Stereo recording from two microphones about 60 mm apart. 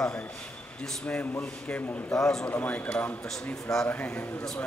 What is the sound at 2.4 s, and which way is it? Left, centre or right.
Speech, left.